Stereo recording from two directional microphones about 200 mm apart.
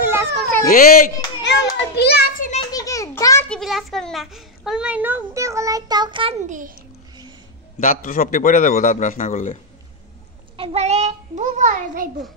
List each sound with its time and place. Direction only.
0.0 s cat: 10° right (ahead or behind)
0.7 s a child's voice: 45° left (ahead or behind)
2.7 s a sound: 15° left (ahead or behind)
3.4 s a child's voice: centre (ahead or behind); by 6.3 s 25° right (ahead or behind)
6.4 s a child's voice: 40° right (ahead or behind)
7.8 s a man's voice: 40° left (ahead or behind)
10.6 s a child's voice: 30° right (ahead or behind)